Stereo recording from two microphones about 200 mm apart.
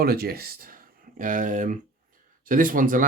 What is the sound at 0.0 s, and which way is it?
Speech, 50° right (ahead or behind).